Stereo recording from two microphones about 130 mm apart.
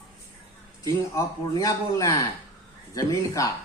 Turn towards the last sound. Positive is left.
turn(degrees=25)  # may be behind; listen again after turning